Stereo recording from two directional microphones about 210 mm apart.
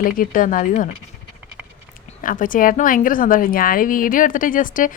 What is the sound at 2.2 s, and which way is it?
A woman's voice, 40° left (ahead or behind).